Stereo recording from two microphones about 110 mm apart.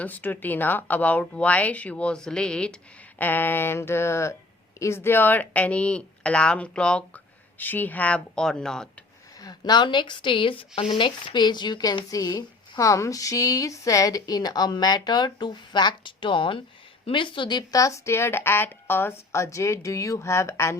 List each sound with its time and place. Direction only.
0.0 s speech: 15° left (ahead or behind)
9.4 s a woman's voice: 40° left (ahead or behind)